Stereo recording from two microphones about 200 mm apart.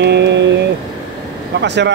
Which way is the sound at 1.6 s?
60° right (ahead or behind).